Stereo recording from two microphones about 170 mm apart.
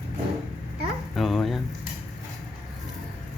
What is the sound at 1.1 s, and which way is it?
Speech, centre (ahead or behind).